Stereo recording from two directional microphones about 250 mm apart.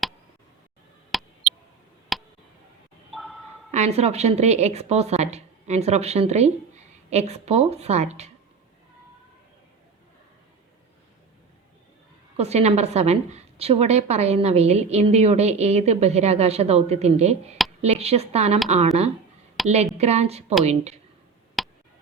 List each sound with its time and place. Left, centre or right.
1.1 s a sound: centre
3.7 s a woman's voice: right
12.4 s a woman's voice: right
19.6 s a woman's voice: right
21.6 s tick: centre